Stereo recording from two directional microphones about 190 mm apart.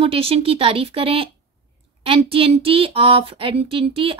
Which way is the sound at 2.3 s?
30° right (ahead or behind).